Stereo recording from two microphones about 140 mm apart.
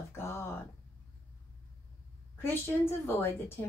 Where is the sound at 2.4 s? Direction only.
15° left (ahead or behind).